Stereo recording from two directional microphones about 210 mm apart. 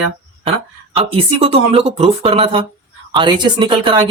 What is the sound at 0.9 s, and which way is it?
A woman's voice, 30° right (ahead or behind).